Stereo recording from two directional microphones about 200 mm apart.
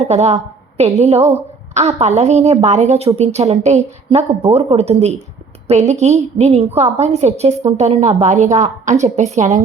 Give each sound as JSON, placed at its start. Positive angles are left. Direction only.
{"t": 0.0, "sound": "a woman's voice", "side_deg": -35}
{"t": 1.3, "sound": "a sound", "side_deg": -35}
{"t": 2.0, "sound": "a woman's voice", "side_deg": -35}